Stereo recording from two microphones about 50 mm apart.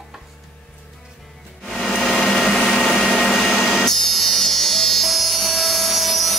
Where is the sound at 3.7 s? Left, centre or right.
Centre.